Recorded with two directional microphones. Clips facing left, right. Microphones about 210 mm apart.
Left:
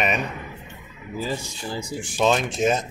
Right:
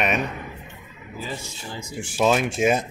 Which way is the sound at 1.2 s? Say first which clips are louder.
Left 5 dB; 35° left (ahead or behind).